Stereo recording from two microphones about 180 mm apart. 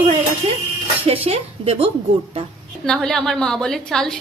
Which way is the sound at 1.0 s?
35° right (ahead or behind).